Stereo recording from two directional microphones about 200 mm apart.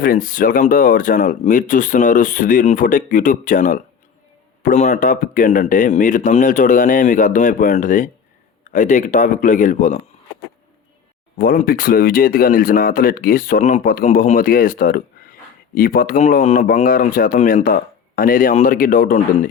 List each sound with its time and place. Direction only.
0.0 s speech: 45° left (ahead or behind)
11.3 s speech: 45° left (ahead or behind)